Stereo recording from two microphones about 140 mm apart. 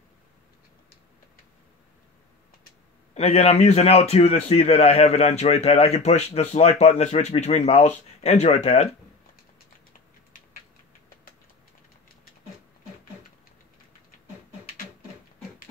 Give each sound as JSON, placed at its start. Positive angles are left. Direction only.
{"t": 3.2, "sound": "a man's voice", "side_deg": 50}